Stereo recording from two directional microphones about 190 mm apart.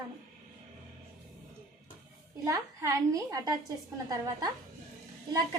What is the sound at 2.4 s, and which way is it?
A woman's voice, 15° right (ahead or behind).